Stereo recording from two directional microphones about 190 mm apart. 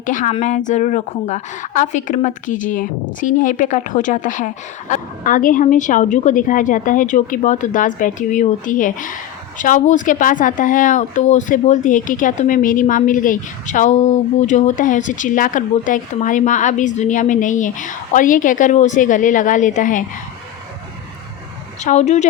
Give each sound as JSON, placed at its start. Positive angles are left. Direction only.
{"t": 0.0, "sound": "a woman's voice", "side_deg": 45}
{"t": 21.8, "sound": "a woman's voice", "side_deg": 35}